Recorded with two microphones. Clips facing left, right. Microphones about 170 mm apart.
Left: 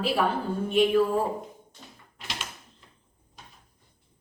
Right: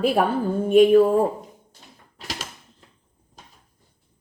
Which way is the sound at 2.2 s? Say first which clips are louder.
Right 4 dB; 40° right (ahead or behind).